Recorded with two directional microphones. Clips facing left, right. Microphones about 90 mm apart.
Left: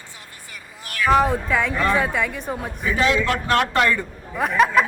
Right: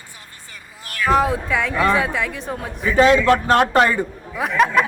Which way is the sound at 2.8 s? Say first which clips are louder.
Right 7 dB; 40° right (ahead or behind).